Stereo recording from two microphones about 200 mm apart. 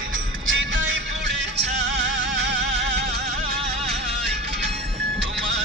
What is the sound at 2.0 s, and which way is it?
Music, 60° right (ahead or behind).